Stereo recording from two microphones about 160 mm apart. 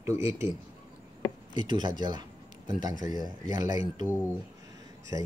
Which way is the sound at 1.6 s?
30° right (ahead or behind).